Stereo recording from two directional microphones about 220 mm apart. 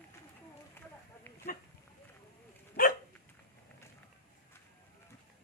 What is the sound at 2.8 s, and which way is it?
Dog, 45° left (ahead or behind).